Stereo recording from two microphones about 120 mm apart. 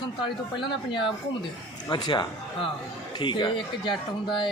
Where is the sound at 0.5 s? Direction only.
45° left (ahead or behind).